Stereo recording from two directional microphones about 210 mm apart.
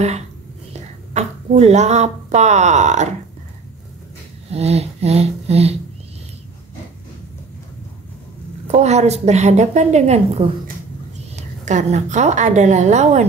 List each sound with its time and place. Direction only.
0.7 s speech: 30° right (ahead or behind)
4.5 s a sound: 30° right (ahead or behind)
8.7 s a woman's voice: 30° right (ahead or behind)